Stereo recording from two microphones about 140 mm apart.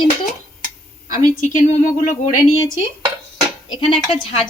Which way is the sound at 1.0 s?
65° left (ahead or behind).